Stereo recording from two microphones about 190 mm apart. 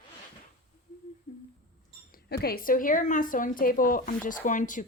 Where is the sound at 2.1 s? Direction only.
55° left (ahead or behind).